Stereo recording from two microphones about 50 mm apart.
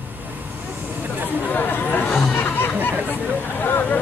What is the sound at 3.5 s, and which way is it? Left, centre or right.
Speech, left.